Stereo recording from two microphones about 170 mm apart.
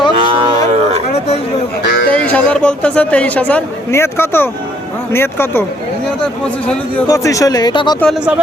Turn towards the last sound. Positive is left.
turn(degrees=25)  # may be behind; listen again after turning